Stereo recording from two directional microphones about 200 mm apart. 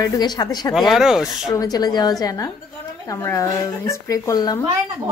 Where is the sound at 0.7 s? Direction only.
Centre (ahead or behind).